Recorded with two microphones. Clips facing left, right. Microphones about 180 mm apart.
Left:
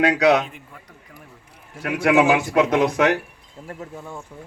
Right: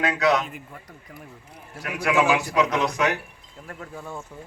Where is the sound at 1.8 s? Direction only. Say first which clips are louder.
Left 5 dB; 60° left (ahead or behind).